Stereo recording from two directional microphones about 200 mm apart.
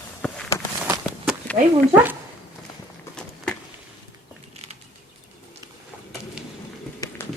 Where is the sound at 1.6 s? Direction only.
35° right (ahead or behind).